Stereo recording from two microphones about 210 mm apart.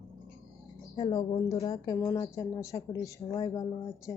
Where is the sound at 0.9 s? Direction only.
25° left (ahead or behind).